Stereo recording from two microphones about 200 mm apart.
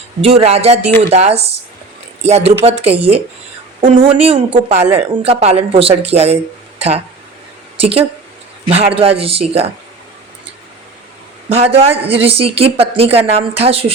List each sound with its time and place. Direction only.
0.2 s speech: 30° right (ahead or behind)
11.4 s speech: 30° right (ahead or behind)